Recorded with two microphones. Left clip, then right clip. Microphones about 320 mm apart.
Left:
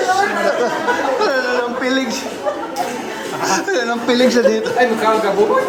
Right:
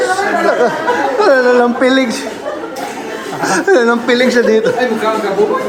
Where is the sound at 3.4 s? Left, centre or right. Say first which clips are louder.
Right 7 dB; centre.